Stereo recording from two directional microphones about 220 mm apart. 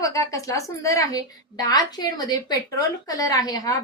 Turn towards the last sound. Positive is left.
turn(degrees=15)  # may be behind; listen again after turning